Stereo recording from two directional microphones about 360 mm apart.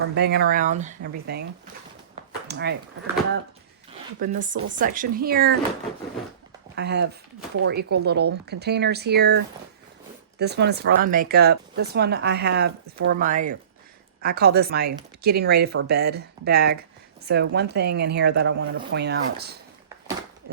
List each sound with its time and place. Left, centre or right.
0.1 s speech: right
2.5 s speech: right
4.2 s speech: right
6.7 s speech: right